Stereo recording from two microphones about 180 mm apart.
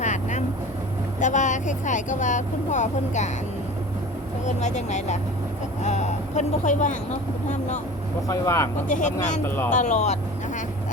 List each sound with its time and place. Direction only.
0.0 s vehicle: 40° left (ahead or behind)
1.2 s speech: 45° left (ahead or behind)
4.4 s speech: 40° left (ahead or behind)
8.3 s speech: 15° left (ahead or behind)
8.9 s speech: 45° left (ahead or behind)